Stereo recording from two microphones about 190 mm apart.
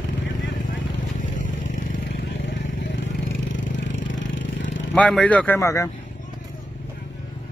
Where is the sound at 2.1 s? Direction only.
70° left (ahead or behind).